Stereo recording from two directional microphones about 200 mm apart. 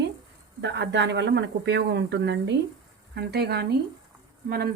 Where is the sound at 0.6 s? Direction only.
60° right (ahead or behind).